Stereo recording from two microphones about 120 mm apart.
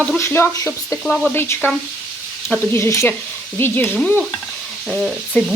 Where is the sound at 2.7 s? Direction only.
20° left (ahead or behind).